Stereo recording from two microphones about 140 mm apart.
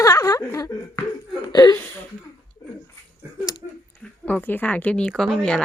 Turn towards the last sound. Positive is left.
turn(degrees=5)  # may be behind; listen again after turning